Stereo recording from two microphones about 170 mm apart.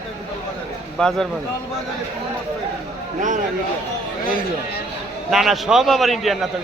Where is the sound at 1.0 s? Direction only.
5° left (ahead or behind).